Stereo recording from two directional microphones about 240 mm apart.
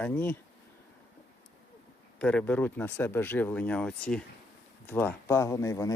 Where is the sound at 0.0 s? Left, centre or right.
Centre.